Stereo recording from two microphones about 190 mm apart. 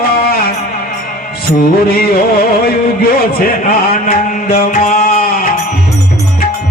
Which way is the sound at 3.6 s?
45° left (ahead or behind).